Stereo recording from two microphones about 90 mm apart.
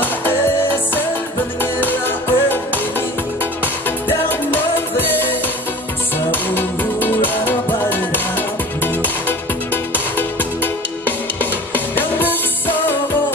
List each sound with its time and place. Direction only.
1.6 s music: 20° left (ahead or behind)
4.3 s music: 20° left (ahead or behind)